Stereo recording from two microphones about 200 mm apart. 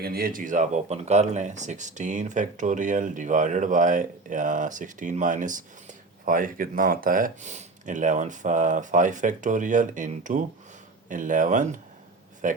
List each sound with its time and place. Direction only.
0.0 s speech: 50° right (ahead or behind)